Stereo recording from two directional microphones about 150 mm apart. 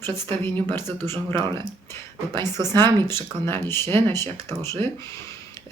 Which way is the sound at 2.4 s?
25° right (ahead or behind).